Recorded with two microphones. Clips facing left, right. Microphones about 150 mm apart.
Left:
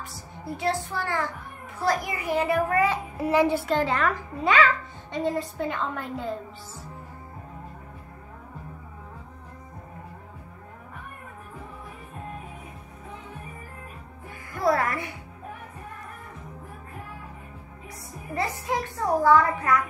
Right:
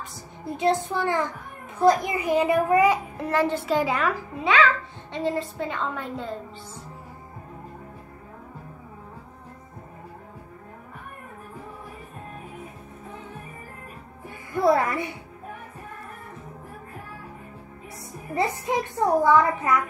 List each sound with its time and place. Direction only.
0.5 s a child's voice: 20° right (ahead or behind)
3.2 s a woman's voice: 10° left (ahead or behind)
3.6 s a woman's voice: 10° right (ahead or behind)
5.1 s a woman's voice: centre (ahead or behind)
14.5 s a child's voice: 20° right (ahead or behind)
18.3 s a child's voice: 20° right (ahead or behind)